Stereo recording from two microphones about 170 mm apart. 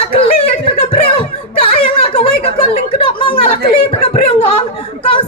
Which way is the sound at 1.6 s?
35° left (ahead or behind).